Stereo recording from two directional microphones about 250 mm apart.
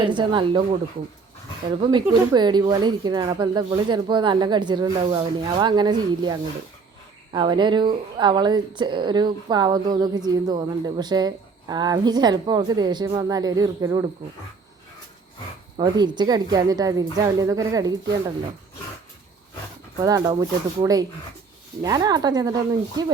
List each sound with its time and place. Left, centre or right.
0.0 s speech: centre
1.8 s a woman's voice: centre
7.3 s a woman's voice: centre
15.8 s a woman's voice: centre
20.0 s a woman's voice: centre